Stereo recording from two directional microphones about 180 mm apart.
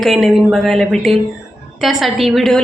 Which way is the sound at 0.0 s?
Centre (ahead or behind).